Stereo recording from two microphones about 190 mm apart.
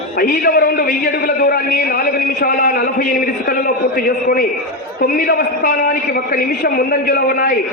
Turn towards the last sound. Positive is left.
turn(degrees=50)  # may be behind; listen again after turning